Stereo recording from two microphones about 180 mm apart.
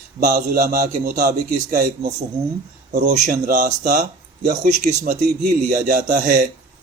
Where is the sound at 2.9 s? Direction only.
40° right (ahead or behind).